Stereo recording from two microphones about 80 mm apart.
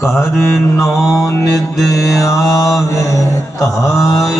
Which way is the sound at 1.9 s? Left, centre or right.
Left.